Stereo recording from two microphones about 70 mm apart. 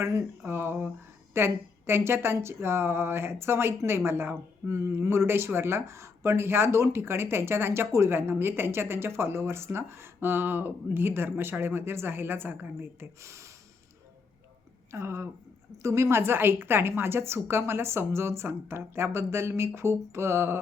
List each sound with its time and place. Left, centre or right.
0.0 s speech: right
13.2 s a sound: right
14.9 s speech: right